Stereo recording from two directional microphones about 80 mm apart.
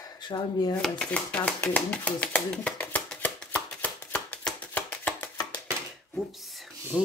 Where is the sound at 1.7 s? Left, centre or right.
Centre.